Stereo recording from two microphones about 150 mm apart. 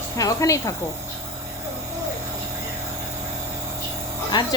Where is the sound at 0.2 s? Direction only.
20° left (ahead or behind).